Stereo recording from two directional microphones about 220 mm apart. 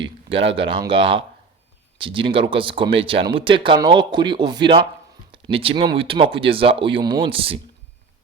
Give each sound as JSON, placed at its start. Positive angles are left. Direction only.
{"t": 0.0, "sound": "speech", "side_deg": -25}